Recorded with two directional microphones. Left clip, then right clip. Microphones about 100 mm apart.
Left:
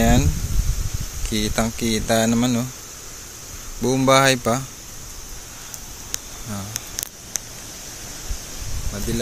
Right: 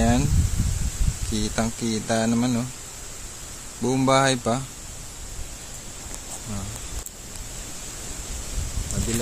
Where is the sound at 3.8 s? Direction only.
10° left (ahead or behind).